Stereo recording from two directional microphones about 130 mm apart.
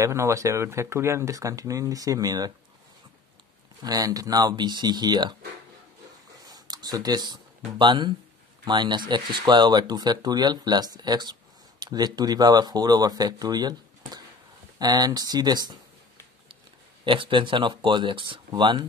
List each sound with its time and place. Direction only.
0.0 s speech: 20° right (ahead or behind)
3.8 s speech: 30° right (ahead or behind)
6.5 s a sound: 30° right (ahead or behind)
7.8 s speech: 35° right (ahead or behind)
17.0 s speech: 40° right (ahead or behind)